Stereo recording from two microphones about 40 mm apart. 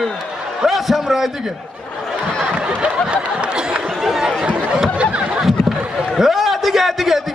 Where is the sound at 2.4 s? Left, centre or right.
Right.